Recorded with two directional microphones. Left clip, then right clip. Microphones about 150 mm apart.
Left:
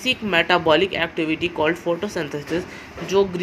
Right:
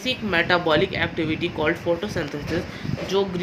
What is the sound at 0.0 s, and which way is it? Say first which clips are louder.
Speech: left 3 dB; 30° left (ahead or behind).